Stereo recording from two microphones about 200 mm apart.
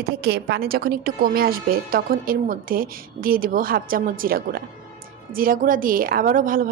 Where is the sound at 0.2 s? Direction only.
55° right (ahead or behind).